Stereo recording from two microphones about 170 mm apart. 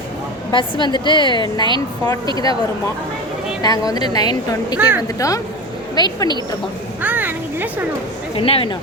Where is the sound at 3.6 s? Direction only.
20° left (ahead or behind).